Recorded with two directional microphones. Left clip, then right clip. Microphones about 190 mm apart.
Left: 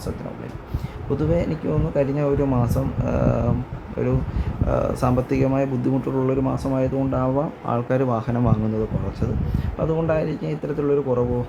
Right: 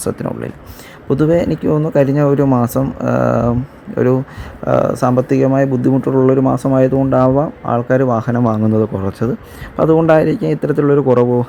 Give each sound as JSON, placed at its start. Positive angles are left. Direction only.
{"t": 1.1, "sound": "a man's voice", "side_deg": -45}
{"t": 9.2, "sound": "speech", "side_deg": -65}